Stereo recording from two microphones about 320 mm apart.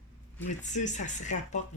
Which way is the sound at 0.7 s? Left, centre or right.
Left.